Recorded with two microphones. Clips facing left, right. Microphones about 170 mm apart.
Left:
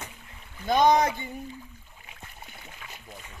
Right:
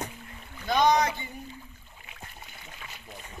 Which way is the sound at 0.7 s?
50° left (ahead or behind).